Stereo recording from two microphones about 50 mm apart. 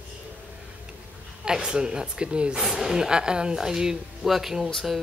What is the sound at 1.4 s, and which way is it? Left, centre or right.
Speech, centre.